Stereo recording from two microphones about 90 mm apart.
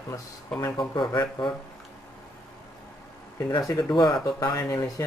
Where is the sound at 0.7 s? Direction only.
55° left (ahead or behind).